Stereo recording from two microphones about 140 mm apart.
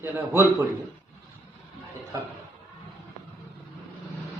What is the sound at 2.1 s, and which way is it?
Speech, 20° right (ahead or behind).